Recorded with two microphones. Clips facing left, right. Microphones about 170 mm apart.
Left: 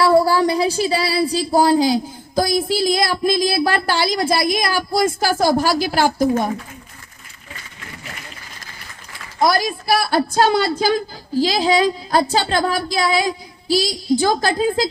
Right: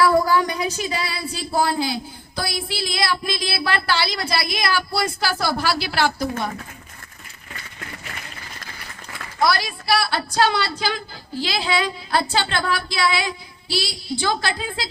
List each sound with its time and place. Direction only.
0.0 s speech: 30° left (ahead or behind)
9.4 s speech: 45° left (ahead or behind)